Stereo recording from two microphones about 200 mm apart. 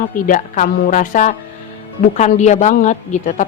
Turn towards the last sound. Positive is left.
turn(degrees=35)  # may be behind; listen again after turning